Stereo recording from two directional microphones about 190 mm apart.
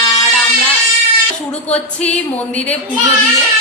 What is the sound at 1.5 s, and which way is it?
A woman's voice, 5° left (ahead or behind).